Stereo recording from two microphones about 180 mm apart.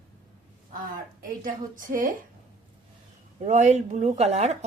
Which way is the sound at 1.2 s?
50° right (ahead or behind).